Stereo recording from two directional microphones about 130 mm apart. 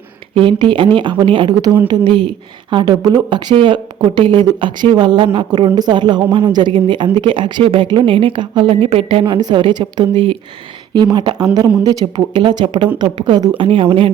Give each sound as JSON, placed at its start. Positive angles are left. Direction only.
{"t": 0.3, "sound": "a woman's voice", "side_deg": -40}